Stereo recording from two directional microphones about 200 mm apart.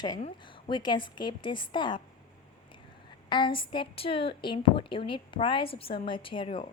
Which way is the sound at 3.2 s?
25° left (ahead or behind).